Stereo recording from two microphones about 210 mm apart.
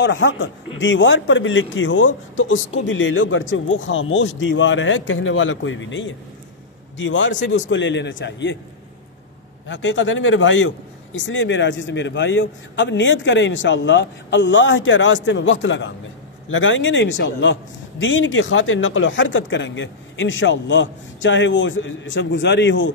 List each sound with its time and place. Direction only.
0.0 s a man's voice: 60° left (ahead or behind)
9.7 s a man's voice: 60° left (ahead or behind)